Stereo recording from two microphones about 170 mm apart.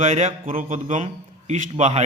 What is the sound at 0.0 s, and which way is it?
A man's voice, 40° right (ahead or behind).